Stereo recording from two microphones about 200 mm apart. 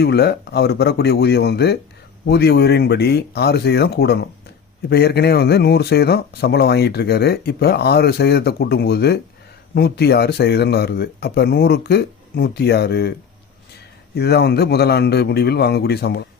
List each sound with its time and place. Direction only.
0.0 s speech: 55° left (ahead or behind)
14.2 s speech: 55° left (ahead or behind)